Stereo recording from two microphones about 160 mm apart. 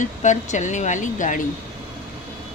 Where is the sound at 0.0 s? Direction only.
50° left (ahead or behind).